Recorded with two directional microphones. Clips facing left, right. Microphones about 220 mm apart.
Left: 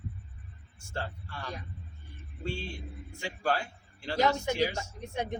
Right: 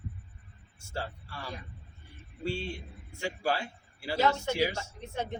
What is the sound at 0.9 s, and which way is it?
Speech, 10° right (ahead or behind).